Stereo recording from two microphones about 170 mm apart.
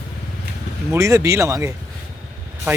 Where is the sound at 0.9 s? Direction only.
20° right (ahead or behind).